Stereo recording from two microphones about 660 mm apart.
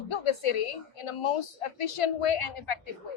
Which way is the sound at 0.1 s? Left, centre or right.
Left.